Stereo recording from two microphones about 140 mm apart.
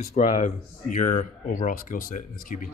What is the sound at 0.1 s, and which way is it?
Speech, 60° left (ahead or behind).